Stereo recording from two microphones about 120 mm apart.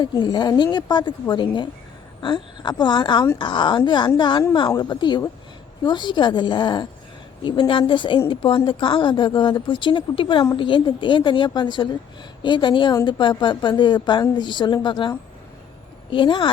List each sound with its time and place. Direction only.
0.0 s a woman's voice: 40° left (ahead or behind)